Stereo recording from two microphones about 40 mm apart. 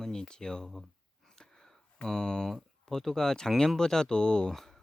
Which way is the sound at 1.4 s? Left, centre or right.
Centre.